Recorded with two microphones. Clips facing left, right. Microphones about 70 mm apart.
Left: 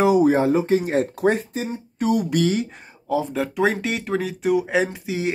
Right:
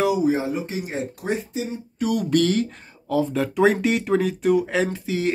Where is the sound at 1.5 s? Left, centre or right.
Left.